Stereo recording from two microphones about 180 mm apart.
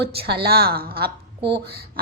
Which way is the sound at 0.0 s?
65° right (ahead or behind).